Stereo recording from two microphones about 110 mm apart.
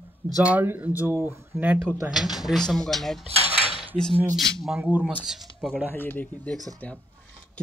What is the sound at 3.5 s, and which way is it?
Cutlery, 50° left (ahead or behind).